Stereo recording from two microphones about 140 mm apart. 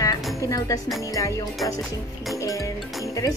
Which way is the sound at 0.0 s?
25° left (ahead or behind).